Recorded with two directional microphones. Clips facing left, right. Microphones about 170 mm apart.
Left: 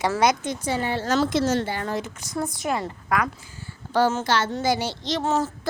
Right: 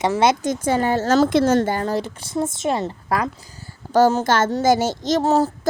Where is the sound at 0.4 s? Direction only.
45° right (ahead or behind).